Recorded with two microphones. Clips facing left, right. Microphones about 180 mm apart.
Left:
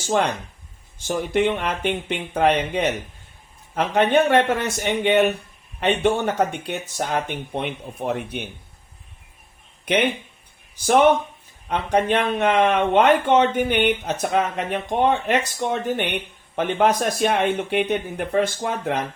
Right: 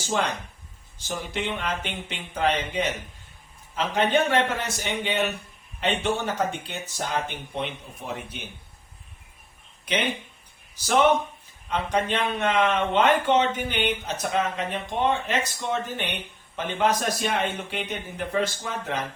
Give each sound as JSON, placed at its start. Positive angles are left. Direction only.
{"t": 0.0, "sound": "speech", "side_deg": 55}
{"t": 9.8, "sound": "speech", "side_deg": 60}